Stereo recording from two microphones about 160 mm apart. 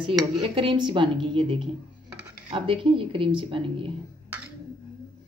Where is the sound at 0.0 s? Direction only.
30° right (ahead or behind).